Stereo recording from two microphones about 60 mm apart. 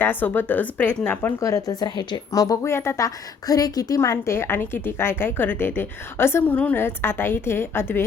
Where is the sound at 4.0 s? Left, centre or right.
Left.